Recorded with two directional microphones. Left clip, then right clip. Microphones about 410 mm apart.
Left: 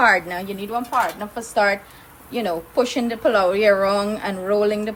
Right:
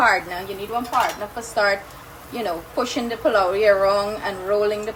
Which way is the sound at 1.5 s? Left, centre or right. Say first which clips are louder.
Left 1 dB; left.